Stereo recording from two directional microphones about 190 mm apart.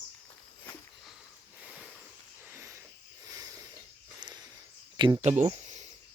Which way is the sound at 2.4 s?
15° right (ahead or behind).